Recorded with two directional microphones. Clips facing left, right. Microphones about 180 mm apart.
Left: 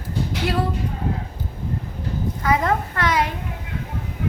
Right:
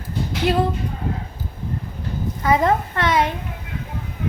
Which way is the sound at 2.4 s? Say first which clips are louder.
Right 3 dB; 25° right (ahead or behind).